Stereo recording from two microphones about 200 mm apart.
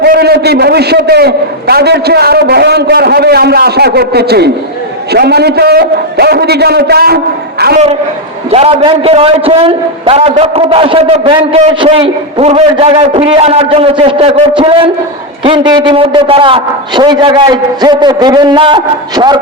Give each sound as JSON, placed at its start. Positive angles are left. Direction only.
{"t": 0.0, "sound": "a man's voice", "side_deg": -55}
{"t": 8.4, "sound": "a man's voice", "side_deg": -30}